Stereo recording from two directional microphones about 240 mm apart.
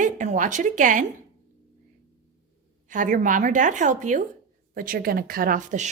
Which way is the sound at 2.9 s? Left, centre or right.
Right.